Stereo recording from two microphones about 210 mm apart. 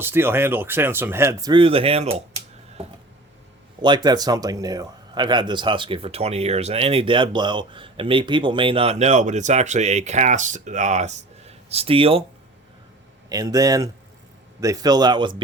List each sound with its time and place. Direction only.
0.0 s speech: 10° right (ahead or behind); by 2.2 s 30° right (ahead or behind)
3.8 s a man's voice: 20° right (ahead or behind)
13.3 s a man's voice: 15° right (ahead or behind)